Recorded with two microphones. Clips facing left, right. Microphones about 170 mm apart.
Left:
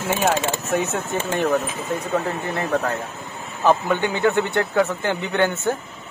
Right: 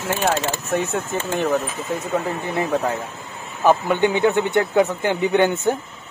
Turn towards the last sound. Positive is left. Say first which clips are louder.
# right 3 dB
turn(degrees=-15)  # may be behind; listen again after turning